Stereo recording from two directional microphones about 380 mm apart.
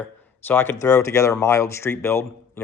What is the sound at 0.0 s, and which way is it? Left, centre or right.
Speech, centre.